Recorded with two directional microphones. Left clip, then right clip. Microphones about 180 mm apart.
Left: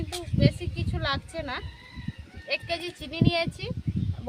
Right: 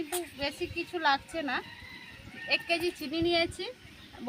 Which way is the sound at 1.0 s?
45° left (ahead or behind).